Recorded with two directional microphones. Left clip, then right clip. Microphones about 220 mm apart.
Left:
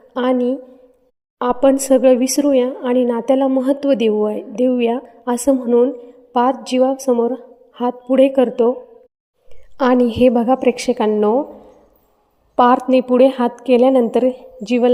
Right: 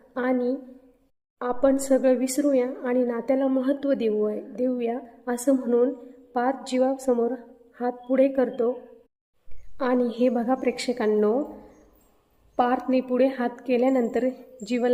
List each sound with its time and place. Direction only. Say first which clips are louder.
0.1 s a woman's voice: left 8 dB; 30° left (ahead or behind)
9.7 s a woman's voice: left 10 dB; 35° left (ahead or behind)
12.5 s speech: left 11 dB; 30° left (ahead or behind)